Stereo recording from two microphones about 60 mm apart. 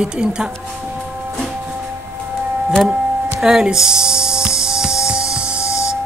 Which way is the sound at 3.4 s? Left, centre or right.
Centre.